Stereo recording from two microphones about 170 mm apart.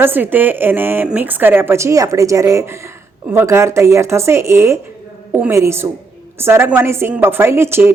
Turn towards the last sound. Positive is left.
turn(degrees=-15)  # may be behind; listen again after turning